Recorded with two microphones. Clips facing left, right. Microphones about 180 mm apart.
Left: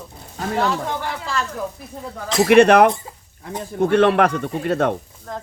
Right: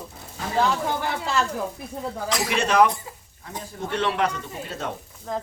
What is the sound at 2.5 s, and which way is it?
Speech, 60° left (ahead or behind).